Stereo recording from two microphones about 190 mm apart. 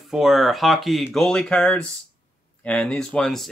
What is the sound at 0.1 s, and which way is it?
Speech, centre (ahead or behind).